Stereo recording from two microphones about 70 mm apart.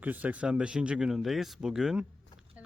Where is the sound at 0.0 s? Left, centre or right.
Right.